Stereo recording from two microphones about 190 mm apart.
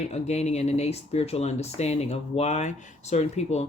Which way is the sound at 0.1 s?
35° left (ahead or behind).